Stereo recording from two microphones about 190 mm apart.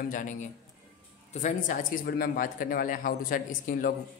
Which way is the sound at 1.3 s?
40° left (ahead or behind).